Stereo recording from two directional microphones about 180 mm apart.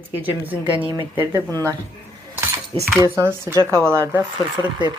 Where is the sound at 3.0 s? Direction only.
15° right (ahead or behind).